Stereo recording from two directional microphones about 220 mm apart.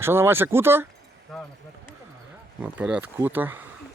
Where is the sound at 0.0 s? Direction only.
10° right (ahead or behind).